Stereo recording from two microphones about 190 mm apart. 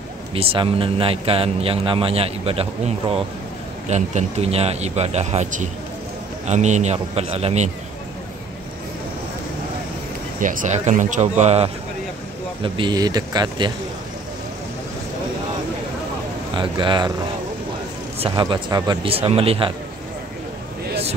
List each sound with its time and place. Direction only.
0.3 s a man's voice: 30° right (ahead or behind)
10.4 s a man's voice: 45° right (ahead or behind); by 13.7 s 20° right (ahead or behind)
16.5 s a man's voice: 25° right (ahead or behind)
18.2 s a man's voice: 25° right (ahead or behind)